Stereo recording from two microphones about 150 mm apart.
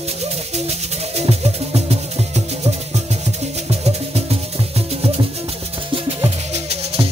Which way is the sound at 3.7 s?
45° right (ahead or behind).